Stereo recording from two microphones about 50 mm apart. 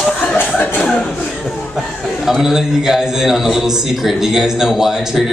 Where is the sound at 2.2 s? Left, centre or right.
Centre.